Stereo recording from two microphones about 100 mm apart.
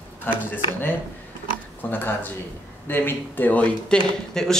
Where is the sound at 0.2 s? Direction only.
20° left (ahead or behind).